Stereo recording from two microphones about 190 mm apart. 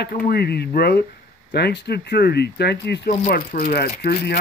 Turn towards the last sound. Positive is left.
turn(degrees=60)  # may be behind; listen again after turning